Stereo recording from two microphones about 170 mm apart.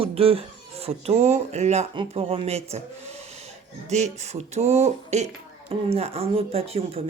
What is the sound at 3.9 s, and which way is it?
Speech, 40° right (ahead or behind).